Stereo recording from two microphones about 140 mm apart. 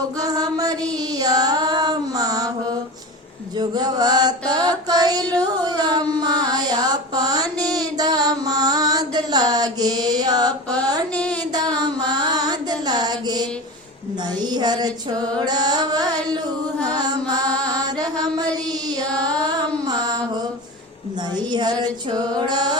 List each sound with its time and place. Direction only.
0.2 s music: 25° right (ahead or behind)
3.6 s mantra: 30° right (ahead or behind)
11.1 s child singing: 10° left (ahead or behind)
11.5 s a sound: 30° right (ahead or behind)
14.3 s carnatic music: 30° right (ahead or behind)
17.7 s mantra: 30° right (ahead or behind)
19.1 s female singing: 5° left (ahead or behind)
19.9 s mantra: 30° right (ahead or behind)
21.5 s carnatic music: 30° right (ahead or behind)